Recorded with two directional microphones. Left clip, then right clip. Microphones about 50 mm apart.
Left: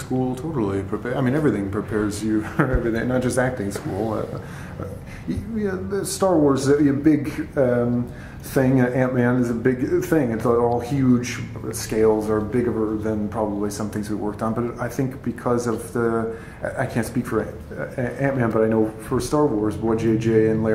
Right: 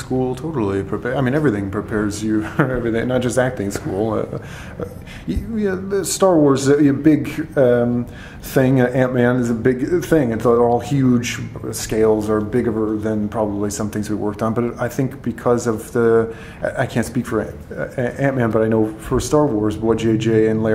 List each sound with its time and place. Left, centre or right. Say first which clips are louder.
0.2 s speech: right 3 dB; centre
5.3 s speech: right 4 dB; centre